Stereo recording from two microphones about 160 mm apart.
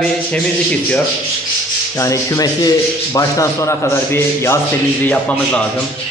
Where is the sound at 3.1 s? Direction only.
20° left (ahead or behind).